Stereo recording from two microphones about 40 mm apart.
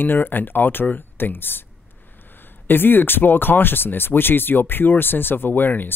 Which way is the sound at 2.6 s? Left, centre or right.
Left.